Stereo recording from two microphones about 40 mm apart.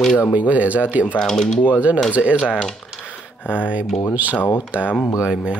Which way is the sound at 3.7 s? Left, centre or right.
Right.